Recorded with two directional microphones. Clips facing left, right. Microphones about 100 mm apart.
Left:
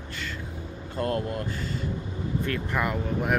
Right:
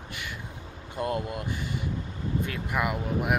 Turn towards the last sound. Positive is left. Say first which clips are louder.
# left 1 dB
turn(degrees=-10)  # may be behind; listen again after turning